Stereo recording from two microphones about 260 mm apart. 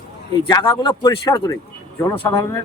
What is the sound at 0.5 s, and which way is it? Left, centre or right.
Speech, centre.